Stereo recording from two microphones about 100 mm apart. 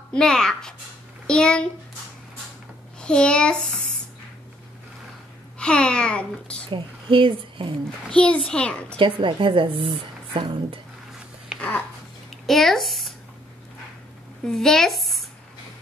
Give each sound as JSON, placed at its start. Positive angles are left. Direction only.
{"t": 0.1, "sound": "speech", "side_deg": 5}
{"t": 3.0, "sound": "a child's voice", "side_deg": 10}
{"t": 5.6, "sound": "a child's voice", "side_deg": 10}
{"t": 6.7, "sound": "speech", "side_deg": -60}
{"t": 8.1, "sound": "a child's voice", "side_deg": 10}
{"t": 8.9, "sound": "a woman's voice", "side_deg": -60}
{"t": 12.4, "sound": "speech", "side_deg": 0}
{"t": 14.4, "sound": "speech", "side_deg": 5}